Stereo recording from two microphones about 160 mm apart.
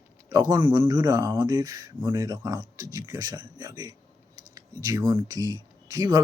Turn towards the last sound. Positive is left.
turn(degrees=-25)  # may be behind; listen again after turning